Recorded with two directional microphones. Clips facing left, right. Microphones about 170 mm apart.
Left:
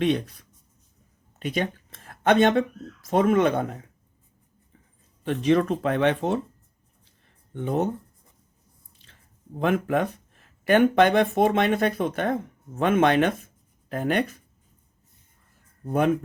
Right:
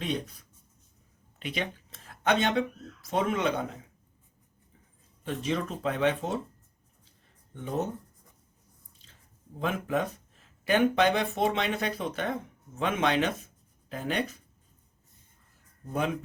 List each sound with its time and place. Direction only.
1.4 s speech: 45° left (ahead or behind)
5.2 s speech: 65° left (ahead or behind)
7.5 s speech: 65° left (ahead or behind)
9.6 s speech: 65° left (ahead or behind)
15.9 s speech: 55° left (ahead or behind)